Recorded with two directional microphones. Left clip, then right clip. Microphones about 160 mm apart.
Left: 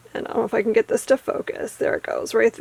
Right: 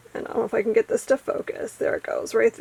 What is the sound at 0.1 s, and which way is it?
Speech, 25° left (ahead or behind).